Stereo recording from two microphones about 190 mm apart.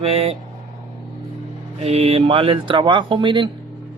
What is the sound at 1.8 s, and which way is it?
Speech, 35° right (ahead or behind).